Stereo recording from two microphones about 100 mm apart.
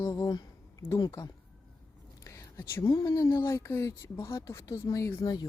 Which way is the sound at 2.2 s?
30° left (ahead or behind).